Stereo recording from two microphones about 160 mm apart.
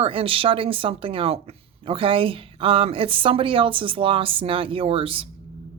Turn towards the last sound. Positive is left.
turn(degrees=-35)  # may be behind; listen again after turning